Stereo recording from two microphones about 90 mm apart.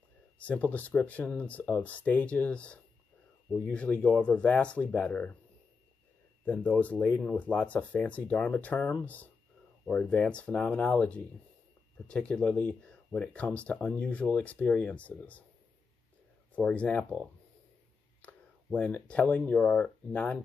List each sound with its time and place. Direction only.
0.4 s speech: 20° left (ahead or behind)
6.4 s speech: 15° left (ahead or behind)
16.5 s speech: 15° left (ahead or behind)
18.2 s speech: 15° left (ahead or behind)